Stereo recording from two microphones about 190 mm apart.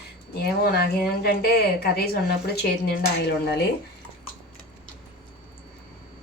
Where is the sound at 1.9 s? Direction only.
55° left (ahead or behind).